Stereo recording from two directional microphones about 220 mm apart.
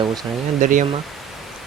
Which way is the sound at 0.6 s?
35° right (ahead or behind).